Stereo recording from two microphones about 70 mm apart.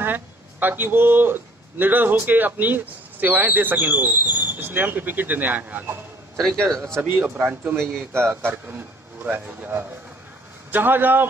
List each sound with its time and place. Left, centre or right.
0.0 s speech: right
6.3 s a man's voice: centre
7.0 s a man's voice: right
8.6 s speech: right